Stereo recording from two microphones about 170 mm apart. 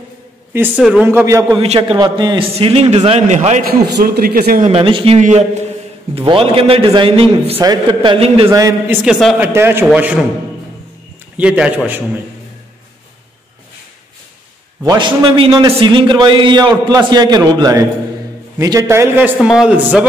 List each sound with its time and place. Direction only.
0.5 s speech: 10° right (ahead or behind)
1.6 s a man's voice: 35° right (ahead or behind)
3.9 s speech: 65° right (ahead or behind)
4.6 s a man's voice: 30° right (ahead or behind)
7.6 s a man's voice: 20° right (ahead or behind)
8.5 s speech: 15° right (ahead or behind); by 9.4 s centre (ahead or behind)
9.4 s speech: 15° right (ahead or behind)
11.3 s speech: 5° right (ahead or behind)
14.8 s a man's voice: 25° right (ahead or behind); by 20.1 s 5° right (ahead or behind)